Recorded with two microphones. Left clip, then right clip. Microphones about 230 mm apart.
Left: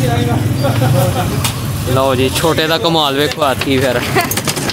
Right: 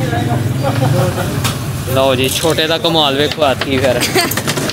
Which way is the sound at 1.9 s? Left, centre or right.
Centre.